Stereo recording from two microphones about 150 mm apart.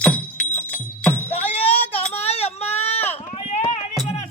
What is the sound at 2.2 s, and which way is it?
Child singing, 45° left (ahead or behind).